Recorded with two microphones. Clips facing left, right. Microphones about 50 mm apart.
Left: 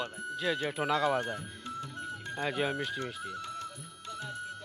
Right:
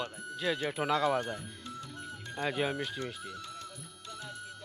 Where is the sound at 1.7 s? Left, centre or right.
Left.